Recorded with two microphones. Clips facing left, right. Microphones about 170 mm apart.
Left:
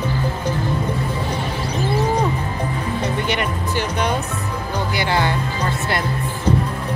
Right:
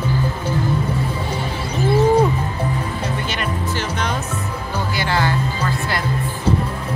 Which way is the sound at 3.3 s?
15° left (ahead or behind).